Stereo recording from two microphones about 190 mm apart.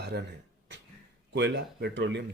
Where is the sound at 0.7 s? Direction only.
70° right (ahead or behind).